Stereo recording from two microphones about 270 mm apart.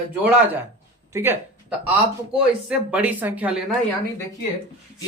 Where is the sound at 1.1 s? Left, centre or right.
Centre.